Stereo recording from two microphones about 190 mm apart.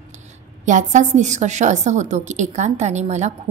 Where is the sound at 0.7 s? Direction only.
40° right (ahead or behind).